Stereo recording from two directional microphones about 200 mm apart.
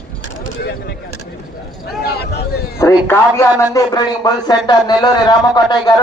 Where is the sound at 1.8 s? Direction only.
55° left (ahead or behind).